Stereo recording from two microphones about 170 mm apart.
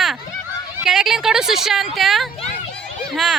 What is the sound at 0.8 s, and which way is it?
Speech, centre (ahead or behind).